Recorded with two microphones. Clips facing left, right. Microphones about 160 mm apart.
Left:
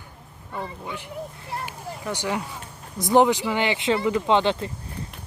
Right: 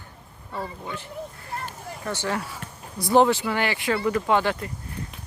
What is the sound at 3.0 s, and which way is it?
Speech, 15° left (ahead or behind).